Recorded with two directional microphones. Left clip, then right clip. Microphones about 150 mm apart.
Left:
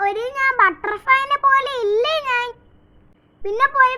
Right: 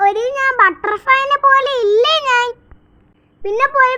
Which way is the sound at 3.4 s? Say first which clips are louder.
Right 3 dB; 25° right (ahead or behind).